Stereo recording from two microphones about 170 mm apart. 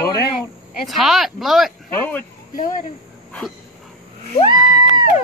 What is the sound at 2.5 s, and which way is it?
Speech, 50° left (ahead or behind).